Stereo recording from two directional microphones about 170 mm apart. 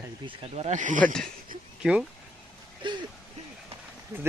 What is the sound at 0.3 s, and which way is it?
Speech, 40° right (ahead or behind).